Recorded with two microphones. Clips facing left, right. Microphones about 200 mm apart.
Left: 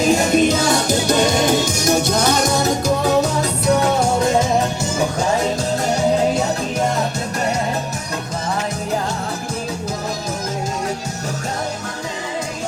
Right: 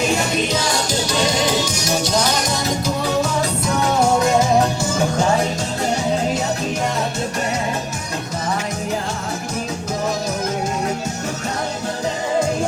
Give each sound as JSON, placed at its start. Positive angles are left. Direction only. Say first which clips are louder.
{"t": 0.1, "sound": "music", "louder": "left 5 dB", "side_deg": 45}